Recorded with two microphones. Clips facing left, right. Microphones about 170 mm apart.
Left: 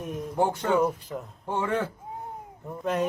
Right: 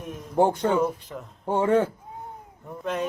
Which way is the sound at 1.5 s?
35° right (ahead or behind).